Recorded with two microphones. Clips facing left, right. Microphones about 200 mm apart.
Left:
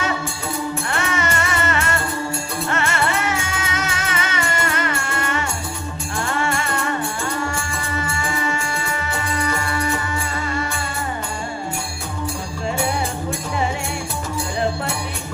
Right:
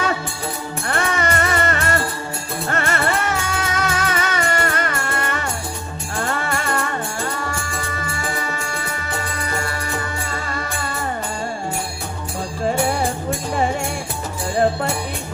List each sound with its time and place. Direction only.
0.9 s music: 35° right (ahead or behind)
8.4 s music: 40° right (ahead or behind)